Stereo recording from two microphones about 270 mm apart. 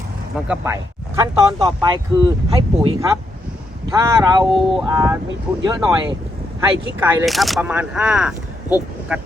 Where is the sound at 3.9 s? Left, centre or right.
Centre.